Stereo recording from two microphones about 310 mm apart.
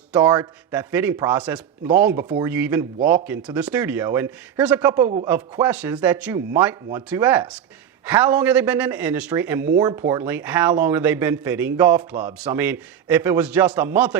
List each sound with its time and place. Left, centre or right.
0.1 s a man's voice: centre
5.0 s chopping: centre
5.3 s a man's voice: centre